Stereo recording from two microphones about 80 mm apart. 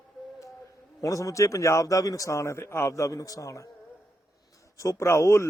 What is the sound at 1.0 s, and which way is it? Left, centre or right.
A man's voice, left.